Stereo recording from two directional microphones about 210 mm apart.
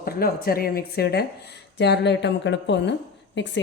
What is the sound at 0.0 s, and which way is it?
A woman's voice, 45° left (ahead or behind).